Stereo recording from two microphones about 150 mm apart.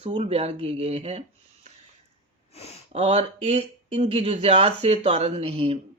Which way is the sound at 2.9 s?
45° right (ahead or behind).